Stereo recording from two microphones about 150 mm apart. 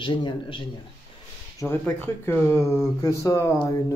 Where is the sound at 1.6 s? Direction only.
15° left (ahead or behind).